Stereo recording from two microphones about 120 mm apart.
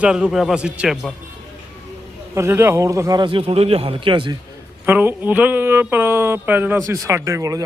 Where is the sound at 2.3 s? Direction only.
20° right (ahead or behind); by 4.3 s 45° right (ahead or behind).